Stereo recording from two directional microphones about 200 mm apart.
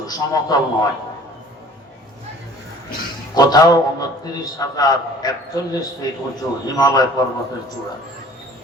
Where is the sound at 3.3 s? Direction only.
20° left (ahead or behind).